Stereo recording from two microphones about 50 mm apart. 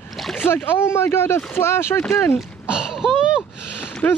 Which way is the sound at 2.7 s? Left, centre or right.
Centre.